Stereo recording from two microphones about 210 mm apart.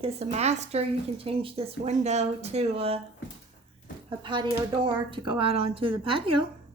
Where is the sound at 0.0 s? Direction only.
30° right (ahead or behind).